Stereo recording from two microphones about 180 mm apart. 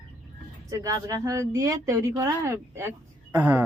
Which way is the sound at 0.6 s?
20° right (ahead or behind).